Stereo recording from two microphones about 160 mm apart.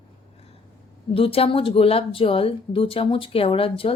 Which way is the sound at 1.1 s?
35° left (ahead or behind).